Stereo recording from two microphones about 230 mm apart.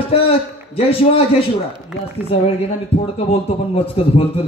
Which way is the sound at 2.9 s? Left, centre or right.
Left.